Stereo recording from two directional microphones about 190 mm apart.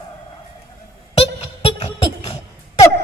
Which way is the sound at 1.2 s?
30° left (ahead or behind).